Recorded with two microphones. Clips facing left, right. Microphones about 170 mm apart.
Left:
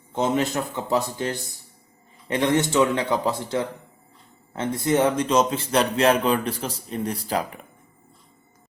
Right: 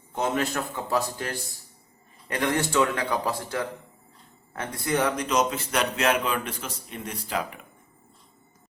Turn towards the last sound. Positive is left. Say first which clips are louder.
# left 5 dB
turn(degrees=35)  # may be behind; listen again after turning